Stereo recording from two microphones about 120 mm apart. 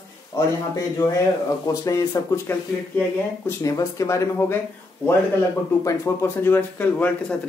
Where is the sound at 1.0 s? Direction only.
20° left (ahead or behind).